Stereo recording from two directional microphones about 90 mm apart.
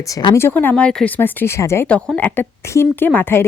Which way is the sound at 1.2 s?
25° left (ahead or behind).